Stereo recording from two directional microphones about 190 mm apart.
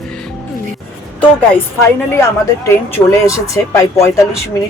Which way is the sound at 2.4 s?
15° left (ahead or behind).